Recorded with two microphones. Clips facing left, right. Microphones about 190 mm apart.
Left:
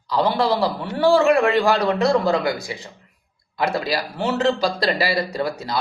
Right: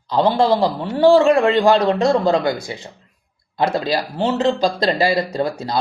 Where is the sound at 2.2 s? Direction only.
25° right (ahead or behind).